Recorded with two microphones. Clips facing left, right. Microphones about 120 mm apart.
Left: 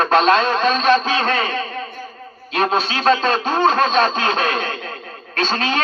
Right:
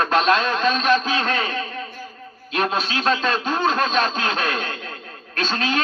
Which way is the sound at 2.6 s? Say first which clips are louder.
Left 4 dB; 35° left (ahead or behind).